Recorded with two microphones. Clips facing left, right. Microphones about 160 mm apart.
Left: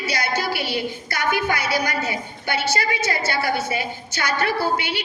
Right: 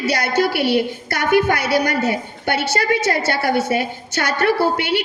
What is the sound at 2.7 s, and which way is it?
A woman's voice, 70° right (ahead or behind).